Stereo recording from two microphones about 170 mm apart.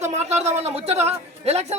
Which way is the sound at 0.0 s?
40° right (ahead or behind).